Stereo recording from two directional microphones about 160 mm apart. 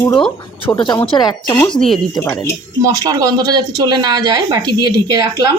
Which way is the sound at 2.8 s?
25° right (ahead or behind).